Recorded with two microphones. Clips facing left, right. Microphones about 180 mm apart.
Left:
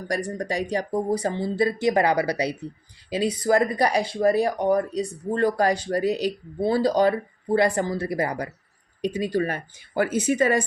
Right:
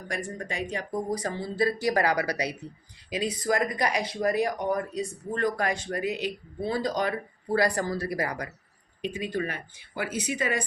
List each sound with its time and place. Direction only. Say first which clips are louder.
0.1 s speech: left 7 dB; 40° left (ahead or behind)